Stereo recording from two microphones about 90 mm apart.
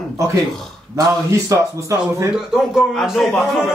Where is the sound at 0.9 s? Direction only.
35° right (ahead or behind).